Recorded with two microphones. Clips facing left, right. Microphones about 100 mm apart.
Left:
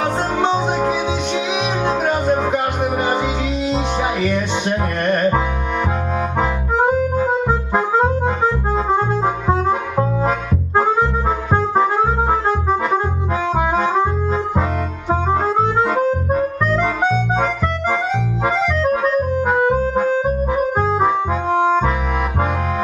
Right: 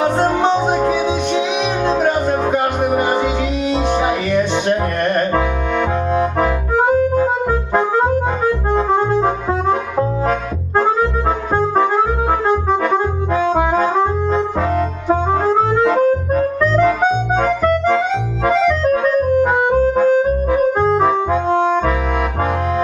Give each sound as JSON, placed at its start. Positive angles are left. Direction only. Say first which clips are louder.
{"t": 3.0, "sound": "music", "louder": "right 2 dB", "side_deg": 5}
{"t": 9.2, "sound": "music", "louder": "right 1 dB", "side_deg": 15}
{"t": 11.5, "sound": "music", "louder": "right 1 dB", "side_deg": 10}
{"t": 12.9, "sound": "accordion", "louder": "right 3 dB", "side_deg": 10}
{"t": 16.0, "sound": "harmonica", "louder": "right 3 dB", "side_deg": 15}
{"t": 19.7, "sound": "music", "louder": "right 4 dB", "side_deg": 15}